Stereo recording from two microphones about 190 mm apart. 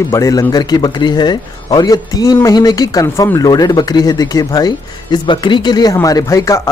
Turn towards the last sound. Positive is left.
turn(degrees=15)  # may be behind; listen again after turning